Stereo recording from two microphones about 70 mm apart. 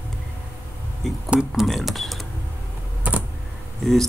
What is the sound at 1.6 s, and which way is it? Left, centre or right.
Speech, centre.